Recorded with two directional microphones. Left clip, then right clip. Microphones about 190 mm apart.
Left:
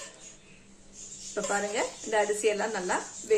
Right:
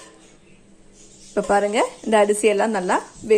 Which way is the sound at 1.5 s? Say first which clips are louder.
Right 11 dB; 40° right (ahead or behind).